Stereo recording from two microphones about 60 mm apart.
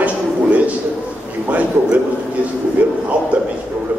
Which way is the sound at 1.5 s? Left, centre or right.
Right.